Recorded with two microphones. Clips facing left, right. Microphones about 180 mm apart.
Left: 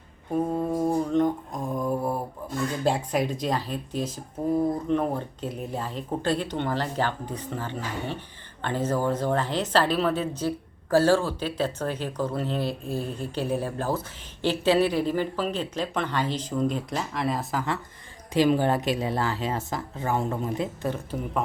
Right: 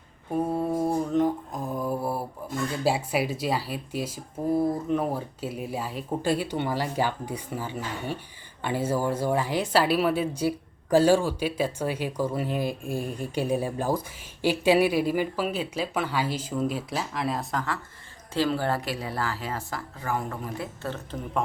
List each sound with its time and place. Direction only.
0.5 s mantra: 5° right (ahead or behind)
2.8 s speech: 5° right (ahead or behind)
18.3 s speech: 15° left (ahead or behind)